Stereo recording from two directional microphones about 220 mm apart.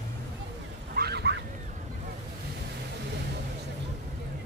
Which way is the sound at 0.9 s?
45° right (ahead or behind).